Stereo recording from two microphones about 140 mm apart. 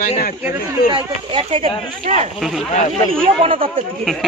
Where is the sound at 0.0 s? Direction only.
90° left.